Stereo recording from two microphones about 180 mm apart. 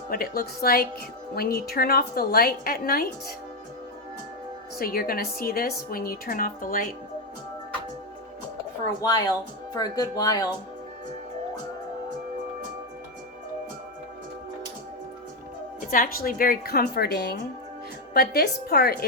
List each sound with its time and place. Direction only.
0.1 s a woman's voice: 55° left (ahead or behind)
4.8 s a woman's voice: 55° left (ahead or behind)
9.0 s speech: 20° left (ahead or behind)
15.9 s a woman's voice: 50° left (ahead or behind)